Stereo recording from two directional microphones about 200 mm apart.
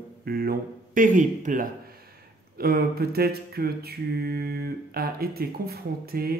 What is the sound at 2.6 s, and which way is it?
Mantra, 50° right (ahead or behind).